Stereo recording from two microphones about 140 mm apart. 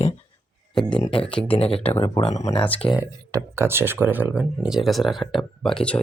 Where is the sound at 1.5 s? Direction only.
40° left (ahead or behind).